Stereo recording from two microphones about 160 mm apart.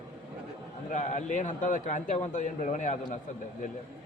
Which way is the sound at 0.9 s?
50° left (ahead or behind).